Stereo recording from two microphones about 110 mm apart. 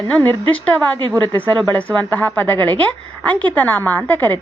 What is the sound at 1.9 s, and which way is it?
A woman's voice, 15° left (ahead or behind).